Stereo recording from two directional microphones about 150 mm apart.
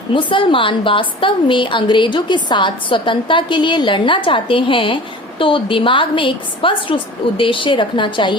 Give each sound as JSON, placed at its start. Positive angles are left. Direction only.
{"t": 0.1, "sound": "a woman's voice", "side_deg": 35}